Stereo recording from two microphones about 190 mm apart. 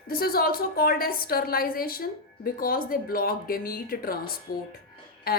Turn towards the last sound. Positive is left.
turn(degrees=55)  # may be behind; listen again after turning